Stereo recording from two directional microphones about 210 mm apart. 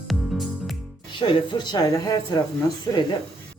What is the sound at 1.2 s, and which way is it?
Speech, 20° left (ahead or behind).